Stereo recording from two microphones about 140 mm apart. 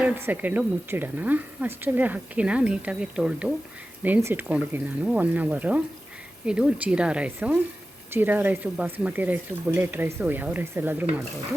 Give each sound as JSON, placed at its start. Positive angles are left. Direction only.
{"t": 0.0, "sound": "speech", "side_deg": -10}